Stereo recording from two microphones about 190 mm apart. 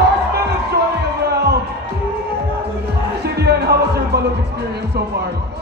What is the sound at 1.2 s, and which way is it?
Music, 60° right (ahead or behind).